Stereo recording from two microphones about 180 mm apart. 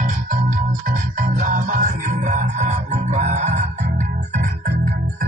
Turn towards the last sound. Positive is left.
turn(degrees=-40)  # may be behind; listen again after turning